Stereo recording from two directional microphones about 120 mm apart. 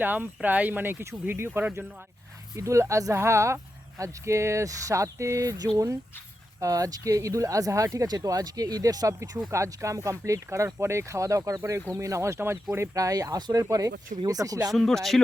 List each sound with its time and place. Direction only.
0.0 s speech: 15° right (ahead or behind); by 14.7 s 30° right (ahead or behind)
14.7 s speech: centre (ahead or behind)